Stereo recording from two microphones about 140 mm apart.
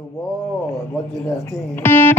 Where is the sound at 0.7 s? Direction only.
20° left (ahead or behind).